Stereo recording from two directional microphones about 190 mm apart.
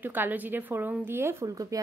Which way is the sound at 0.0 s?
10° right (ahead or behind).